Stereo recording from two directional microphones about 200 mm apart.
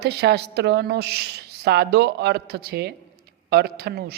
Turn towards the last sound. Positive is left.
turn(degrees=-55)  # may be behind; listen again after turning